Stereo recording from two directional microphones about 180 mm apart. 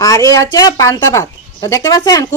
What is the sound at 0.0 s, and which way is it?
A woman's voice, 20° left (ahead or behind).